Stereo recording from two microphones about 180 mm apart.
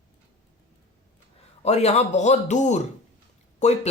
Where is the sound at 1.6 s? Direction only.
35° left (ahead or behind).